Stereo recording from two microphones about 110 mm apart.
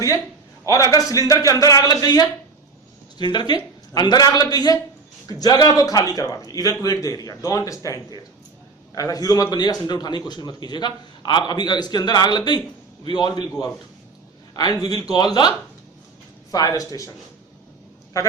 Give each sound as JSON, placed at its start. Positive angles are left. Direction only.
{"t": 0.6, "sound": "a man's voice", "side_deg": 30}
{"t": 14.5, "sound": "a man's voice", "side_deg": 35}